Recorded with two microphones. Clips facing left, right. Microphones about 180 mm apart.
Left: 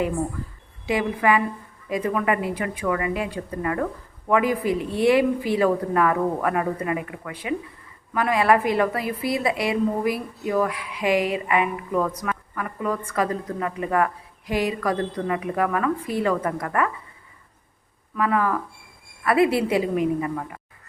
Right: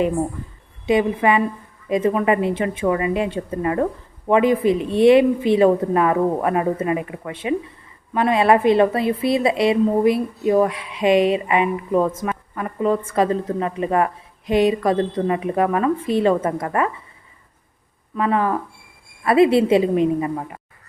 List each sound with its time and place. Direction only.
0.9 s a woman's voice: 25° right (ahead or behind)
18.2 s a woman's voice: 25° right (ahead or behind)